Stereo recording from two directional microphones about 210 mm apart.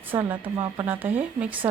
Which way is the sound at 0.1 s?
10° right (ahead or behind).